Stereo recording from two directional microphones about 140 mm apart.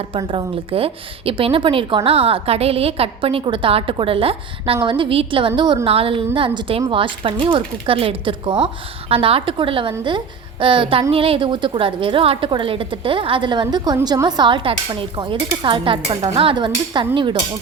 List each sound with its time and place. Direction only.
0.1 s a woman's voice: 40° right (ahead or behind)